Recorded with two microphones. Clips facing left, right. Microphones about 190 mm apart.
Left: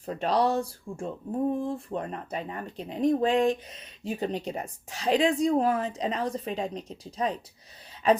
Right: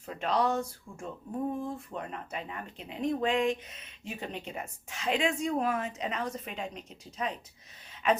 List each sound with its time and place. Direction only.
0.0 s speech: 35° left (ahead or behind)